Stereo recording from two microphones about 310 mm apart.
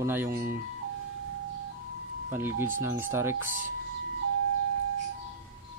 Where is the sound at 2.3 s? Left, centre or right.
Centre.